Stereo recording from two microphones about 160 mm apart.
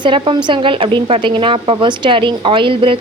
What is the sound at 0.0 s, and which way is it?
A woman's voice, 30° right (ahead or behind).